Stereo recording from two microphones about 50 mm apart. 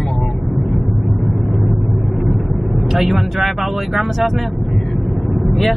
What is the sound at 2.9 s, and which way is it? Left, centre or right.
Speech, centre.